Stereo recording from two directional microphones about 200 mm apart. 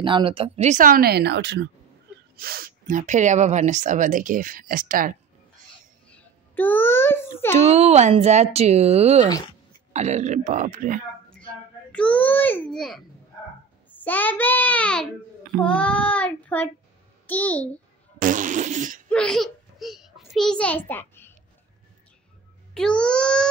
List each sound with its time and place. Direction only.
0.0 s a woman's voice: 25° right (ahead or behind); by 5.1 s 45° right (ahead or behind)
6.0 s a sound: 5° left (ahead or behind)
7.5 s speech: 30° right (ahead or behind)
11.9 s a child's voice: 5° left (ahead or behind)
18.2 s fart: 40° right (ahead or behind)
19.0 s a child's voice: 5° left (ahead or behind)
22.8 s a child's voice: 5° left (ahead or behind)